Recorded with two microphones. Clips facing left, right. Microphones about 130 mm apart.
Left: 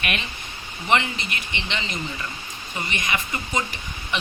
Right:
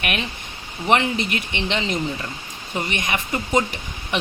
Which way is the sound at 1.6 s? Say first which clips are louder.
Right 8 dB; 55° right (ahead or behind).